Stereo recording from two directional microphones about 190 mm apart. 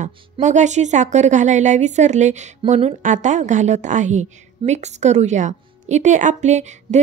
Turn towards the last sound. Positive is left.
turn(degrees=-35)  # may be behind; listen again after turning